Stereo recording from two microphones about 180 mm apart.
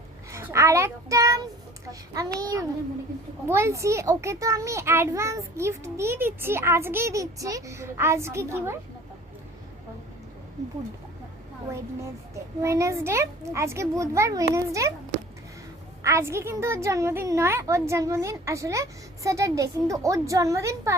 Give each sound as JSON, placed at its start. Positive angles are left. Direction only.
{"t": 0.3, "sound": "child singing", "side_deg": -15}
{"t": 1.9, "sound": "a child's voice", "side_deg": -20}
{"t": 12.3, "sound": "a child's voice", "side_deg": -15}
{"t": 16.0, "sound": "a child's voice", "side_deg": -15}